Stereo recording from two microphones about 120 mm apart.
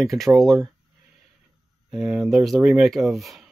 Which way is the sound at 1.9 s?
5° right (ahead or behind).